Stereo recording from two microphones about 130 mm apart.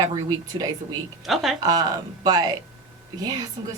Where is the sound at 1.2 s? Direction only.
Centre (ahead or behind).